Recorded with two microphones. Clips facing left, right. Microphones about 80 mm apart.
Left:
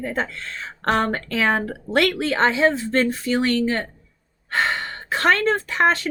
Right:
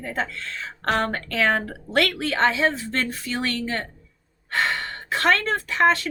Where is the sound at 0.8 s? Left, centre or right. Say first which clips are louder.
Left 3 dB; centre.